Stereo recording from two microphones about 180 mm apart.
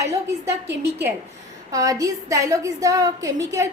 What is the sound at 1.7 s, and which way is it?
A woman's voice, 20° right (ahead or behind).